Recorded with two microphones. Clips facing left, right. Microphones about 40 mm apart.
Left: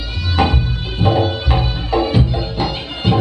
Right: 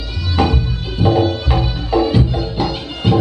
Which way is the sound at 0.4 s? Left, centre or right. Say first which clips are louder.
Even; left.